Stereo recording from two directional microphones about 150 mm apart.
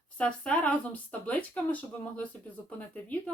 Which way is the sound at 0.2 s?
5° left (ahead or behind).